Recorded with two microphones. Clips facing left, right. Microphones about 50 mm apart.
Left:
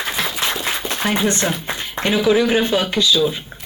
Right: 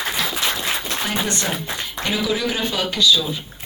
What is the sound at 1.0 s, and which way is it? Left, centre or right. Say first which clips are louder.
Speech: left 7 dB; left.